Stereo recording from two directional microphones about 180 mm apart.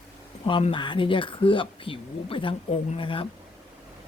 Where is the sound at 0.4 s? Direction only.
30° left (ahead or behind).